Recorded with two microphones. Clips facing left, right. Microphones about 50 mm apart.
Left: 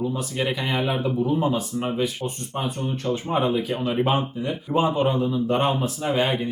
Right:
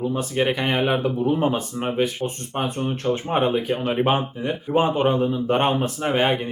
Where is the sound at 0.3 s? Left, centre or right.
Right.